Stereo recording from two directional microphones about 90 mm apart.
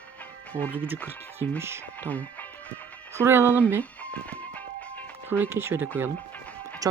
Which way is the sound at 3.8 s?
15° left (ahead or behind).